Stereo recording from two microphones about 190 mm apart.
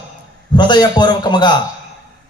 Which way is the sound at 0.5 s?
25° left (ahead or behind).